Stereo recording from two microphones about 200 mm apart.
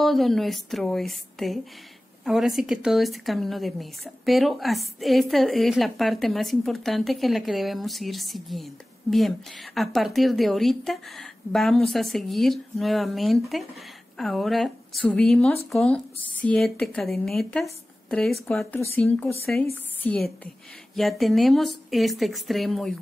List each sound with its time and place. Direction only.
0.0 s a woman's voice: centre (ahead or behind)